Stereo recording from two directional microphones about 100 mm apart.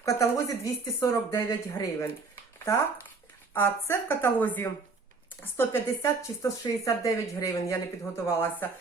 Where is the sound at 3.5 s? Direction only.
20° left (ahead or behind).